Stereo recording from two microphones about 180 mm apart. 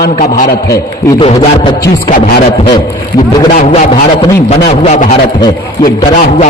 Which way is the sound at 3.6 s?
45° left (ahead or behind).